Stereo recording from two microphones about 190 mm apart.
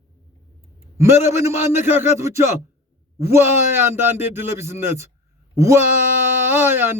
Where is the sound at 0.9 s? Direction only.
15° right (ahead or behind).